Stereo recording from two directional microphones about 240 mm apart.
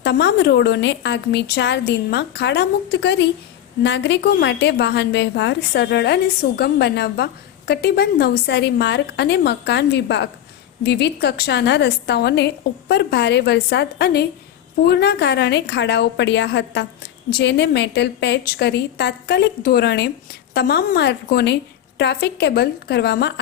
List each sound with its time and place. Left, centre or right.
0.0 s a woman's voice: left